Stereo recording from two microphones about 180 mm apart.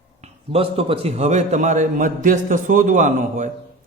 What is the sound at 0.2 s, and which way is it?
A man's voice, 30° right (ahead or behind).